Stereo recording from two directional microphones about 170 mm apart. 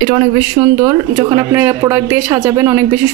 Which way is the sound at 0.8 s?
15° right (ahead or behind).